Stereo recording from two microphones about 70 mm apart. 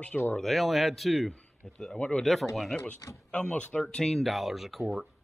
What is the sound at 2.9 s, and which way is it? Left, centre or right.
Speech, left.